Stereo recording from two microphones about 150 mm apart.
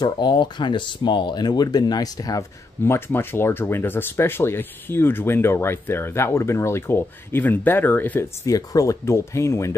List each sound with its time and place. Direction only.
0.0 s speech: 30° left (ahead or behind)